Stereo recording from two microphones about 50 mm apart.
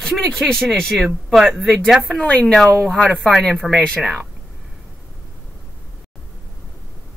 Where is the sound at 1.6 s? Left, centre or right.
Centre.